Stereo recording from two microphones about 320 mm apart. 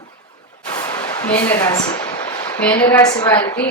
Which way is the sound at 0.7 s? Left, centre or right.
Centre.